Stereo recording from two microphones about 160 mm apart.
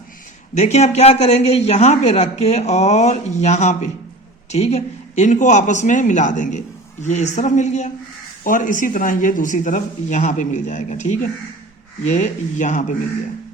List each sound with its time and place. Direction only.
0.5 s speech: 45° left (ahead or behind)